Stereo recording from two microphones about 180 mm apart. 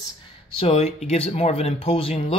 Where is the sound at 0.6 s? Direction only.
35° left (ahead or behind).